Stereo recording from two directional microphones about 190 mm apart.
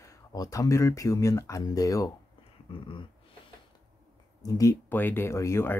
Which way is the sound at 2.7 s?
25° left (ahead or behind).